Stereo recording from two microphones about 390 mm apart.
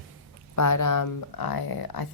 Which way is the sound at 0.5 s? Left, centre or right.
Left.